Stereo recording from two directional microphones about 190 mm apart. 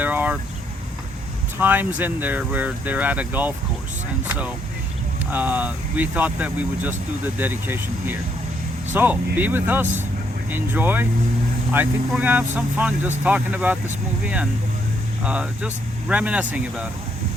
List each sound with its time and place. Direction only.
0.0 s vehicle: 10° right (ahead or behind)
1.5 s speech: 10° right (ahead or behind)
5.3 s speech: 10° right (ahead or behind)
15.2 s speech: 5° right (ahead or behind)